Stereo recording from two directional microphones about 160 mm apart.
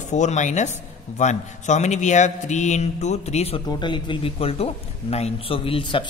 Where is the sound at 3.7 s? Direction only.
30° left (ahead or behind).